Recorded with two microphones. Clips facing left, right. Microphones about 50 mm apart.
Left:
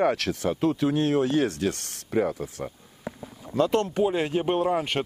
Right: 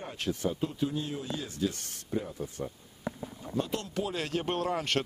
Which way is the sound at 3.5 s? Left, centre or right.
Left.